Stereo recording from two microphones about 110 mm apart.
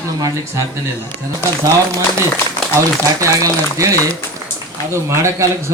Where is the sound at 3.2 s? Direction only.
30° right (ahead or behind).